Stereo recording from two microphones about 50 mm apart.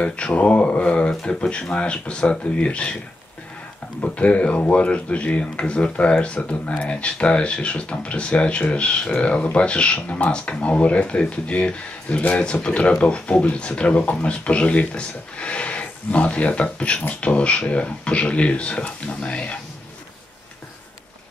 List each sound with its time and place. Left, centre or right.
0.0 s speech: left
4.0 s speech: left